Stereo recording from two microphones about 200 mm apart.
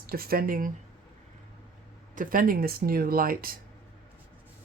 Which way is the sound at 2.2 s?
45° right (ahead or behind).